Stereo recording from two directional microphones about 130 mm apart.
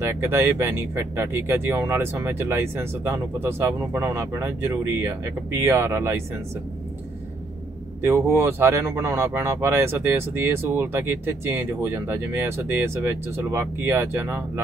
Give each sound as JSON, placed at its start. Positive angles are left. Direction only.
{"t": 0.0, "sound": "speech", "side_deg": -20}
{"t": 8.0, "sound": "speech", "side_deg": -20}